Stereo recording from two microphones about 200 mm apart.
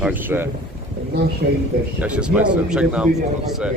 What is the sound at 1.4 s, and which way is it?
Speech, 50° right (ahead or behind).